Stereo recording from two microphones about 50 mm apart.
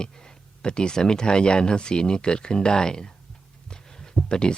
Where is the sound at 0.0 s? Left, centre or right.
Centre.